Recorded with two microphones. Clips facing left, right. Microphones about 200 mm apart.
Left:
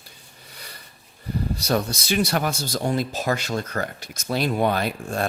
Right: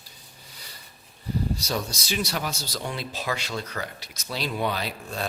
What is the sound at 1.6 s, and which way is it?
Speech, 60° left (ahead or behind).